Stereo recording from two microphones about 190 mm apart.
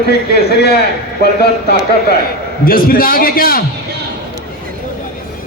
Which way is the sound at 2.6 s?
50° left (ahead or behind).